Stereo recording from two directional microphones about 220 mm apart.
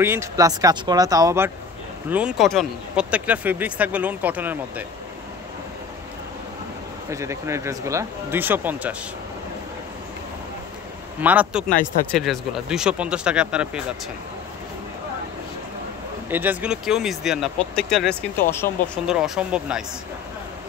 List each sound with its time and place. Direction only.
0.0 s speech: 10° right (ahead or behind)
7.1 s speech: 15° right (ahead or behind)
11.1 s speech: 5° right (ahead or behind)
16.3 s speech: 10° right (ahead or behind)